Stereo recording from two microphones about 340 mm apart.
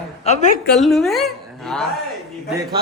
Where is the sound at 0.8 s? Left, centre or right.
Centre.